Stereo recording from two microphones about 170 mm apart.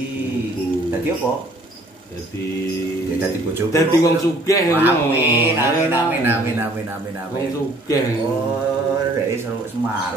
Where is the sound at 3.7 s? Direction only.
20° left (ahead or behind).